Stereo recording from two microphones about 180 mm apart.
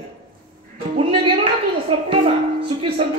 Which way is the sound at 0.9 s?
30° right (ahead or behind).